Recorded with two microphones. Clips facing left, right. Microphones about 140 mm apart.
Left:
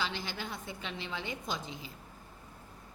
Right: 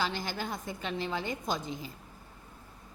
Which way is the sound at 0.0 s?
45° right (ahead or behind).